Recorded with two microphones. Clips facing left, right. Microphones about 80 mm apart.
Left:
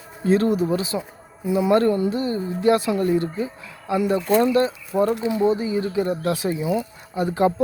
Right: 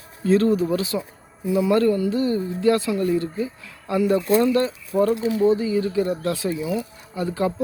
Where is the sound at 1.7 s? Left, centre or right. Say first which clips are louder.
Left 1 dB; left.